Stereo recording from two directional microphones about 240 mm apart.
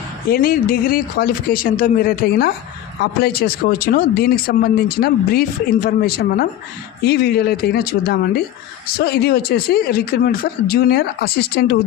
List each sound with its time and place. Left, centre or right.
0.3 s speech: left